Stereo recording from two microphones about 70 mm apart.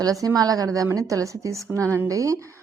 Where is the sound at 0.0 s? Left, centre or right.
Right.